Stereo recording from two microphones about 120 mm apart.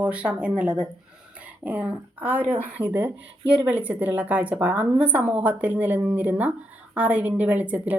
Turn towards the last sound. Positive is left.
turn(degrees=-15)  # may be behind; listen again after turning